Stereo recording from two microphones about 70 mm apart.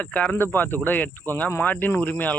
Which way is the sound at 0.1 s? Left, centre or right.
Left.